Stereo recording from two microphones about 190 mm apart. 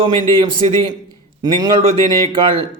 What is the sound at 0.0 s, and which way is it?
A man's voice, 25° right (ahead or behind).